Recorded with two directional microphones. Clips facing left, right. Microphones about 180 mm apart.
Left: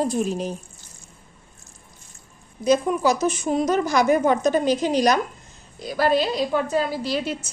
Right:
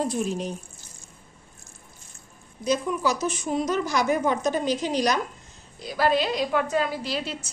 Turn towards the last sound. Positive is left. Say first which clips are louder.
# left 5 dB
turn(degrees=45)  # may be behind; listen again after turning